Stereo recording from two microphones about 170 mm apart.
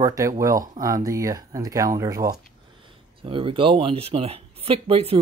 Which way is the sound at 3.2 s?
30° right (ahead or behind).